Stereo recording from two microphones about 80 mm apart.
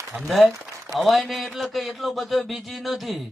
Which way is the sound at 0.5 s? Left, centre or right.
Right.